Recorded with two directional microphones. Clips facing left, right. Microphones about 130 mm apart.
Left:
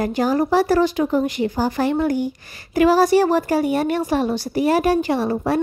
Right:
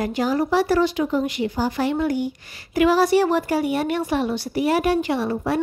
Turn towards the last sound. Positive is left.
turn(degrees=40)  # may be behind; listen again after turning